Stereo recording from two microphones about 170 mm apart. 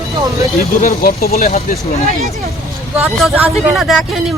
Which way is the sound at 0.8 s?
60° left (ahead or behind).